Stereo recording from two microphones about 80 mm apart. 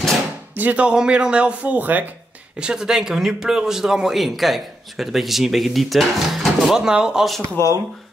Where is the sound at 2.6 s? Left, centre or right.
Centre.